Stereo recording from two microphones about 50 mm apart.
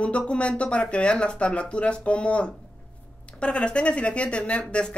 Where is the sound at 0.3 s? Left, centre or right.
Left.